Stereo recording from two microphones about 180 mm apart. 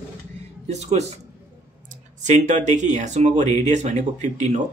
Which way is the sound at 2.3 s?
40° right (ahead or behind).